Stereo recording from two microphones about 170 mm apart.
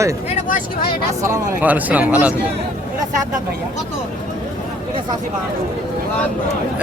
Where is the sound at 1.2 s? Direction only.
15° right (ahead or behind).